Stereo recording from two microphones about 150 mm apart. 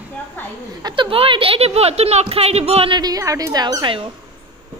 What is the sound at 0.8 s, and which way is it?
Speech, 35° right (ahead or behind).